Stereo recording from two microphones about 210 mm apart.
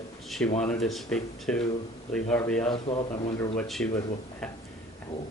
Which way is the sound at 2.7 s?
25° left (ahead or behind).